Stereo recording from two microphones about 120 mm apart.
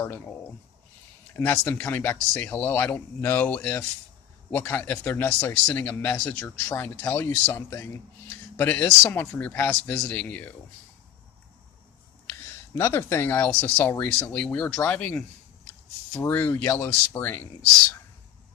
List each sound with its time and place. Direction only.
1.4 s speech: 20° left (ahead or behind)
12.3 s speech: 20° left (ahead or behind)
16.2 s speech: 15° left (ahead or behind)